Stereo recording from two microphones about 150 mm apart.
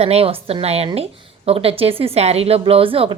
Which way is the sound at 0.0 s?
40° right (ahead or behind).